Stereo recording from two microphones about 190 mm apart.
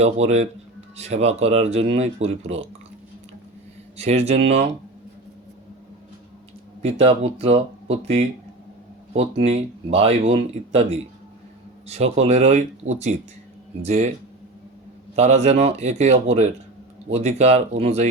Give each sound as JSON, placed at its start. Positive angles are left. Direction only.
{"t": 0.0, "sound": "speech", "side_deg": -35}
{"t": 3.9, "sound": "speech", "side_deg": -35}
{"t": 6.8, "sound": "speech", "side_deg": -30}
{"t": 11.9, "sound": "speech", "side_deg": -35}
{"t": 15.1, "sound": "speech", "side_deg": -35}